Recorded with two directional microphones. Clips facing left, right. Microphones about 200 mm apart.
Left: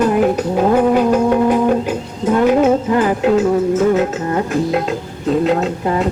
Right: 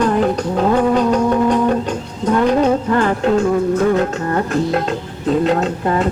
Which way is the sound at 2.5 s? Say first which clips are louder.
Left 2 dB; 10° left (ahead or behind).